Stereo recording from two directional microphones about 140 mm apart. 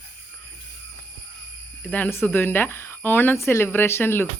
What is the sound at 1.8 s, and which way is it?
Speech, 10° left (ahead or behind).